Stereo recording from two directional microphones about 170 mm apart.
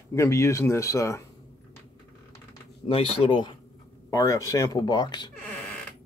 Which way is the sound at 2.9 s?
30° left (ahead or behind).